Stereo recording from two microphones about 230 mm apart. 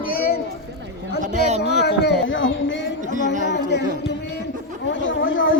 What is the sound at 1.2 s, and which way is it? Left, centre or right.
Speech, right.